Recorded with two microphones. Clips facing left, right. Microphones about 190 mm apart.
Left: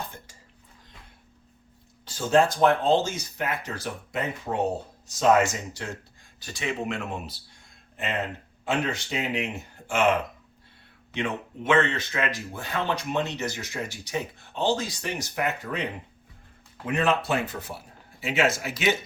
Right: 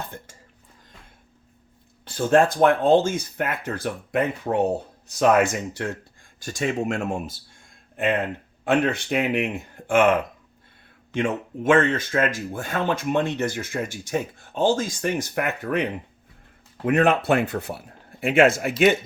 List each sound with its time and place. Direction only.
2.0 s speech: 55° right (ahead or behind)
6.4 s speech: 45° right (ahead or behind)
16.8 s speech: 60° right (ahead or behind)